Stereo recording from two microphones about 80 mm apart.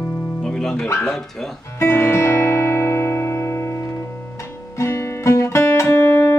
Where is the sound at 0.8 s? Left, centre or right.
Left.